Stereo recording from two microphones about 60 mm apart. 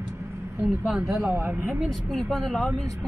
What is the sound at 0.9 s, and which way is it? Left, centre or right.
Speech, centre.